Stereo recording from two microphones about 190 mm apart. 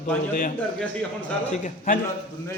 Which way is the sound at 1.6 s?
40° left (ahead or behind).